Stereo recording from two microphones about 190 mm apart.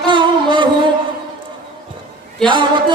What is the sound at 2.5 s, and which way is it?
Speech, 25° right (ahead or behind).